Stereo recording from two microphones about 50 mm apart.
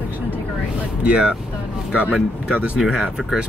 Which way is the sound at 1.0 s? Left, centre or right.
Right.